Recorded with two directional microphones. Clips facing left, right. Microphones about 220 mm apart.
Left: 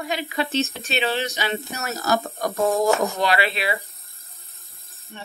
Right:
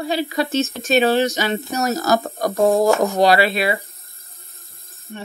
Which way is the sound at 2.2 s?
15° right (ahead or behind).